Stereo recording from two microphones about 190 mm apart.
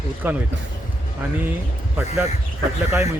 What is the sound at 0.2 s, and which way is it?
Speech, 10° right (ahead or behind).